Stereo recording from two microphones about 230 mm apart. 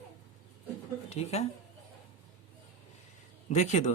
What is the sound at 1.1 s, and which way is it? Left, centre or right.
Speech, left.